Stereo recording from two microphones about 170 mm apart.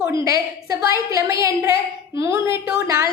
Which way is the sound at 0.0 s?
20° right (ahead or behind).